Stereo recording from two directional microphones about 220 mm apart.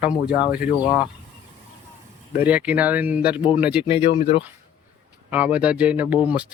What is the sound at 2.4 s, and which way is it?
Speech, 5° right (ahead or behind).